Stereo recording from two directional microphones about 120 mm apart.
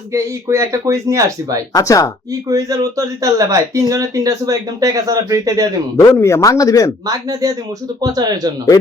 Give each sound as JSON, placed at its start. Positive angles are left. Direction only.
{"t": 0.1, "sound": "speech", "side_deg": -25}
{"t": 1.7, "sound": "speech", "side_deg": 30}
{"t": 2.5, "sound": "speech", "side_deg": -25}
{"t": 6.1, "sound": "speech", "side_deg": 25}
{"t": 7.1, "sound": "speech", "side_deg": -30}